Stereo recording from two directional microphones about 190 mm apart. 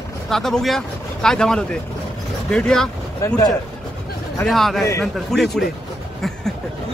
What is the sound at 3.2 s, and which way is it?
Speech, 15° left (ahead or behind).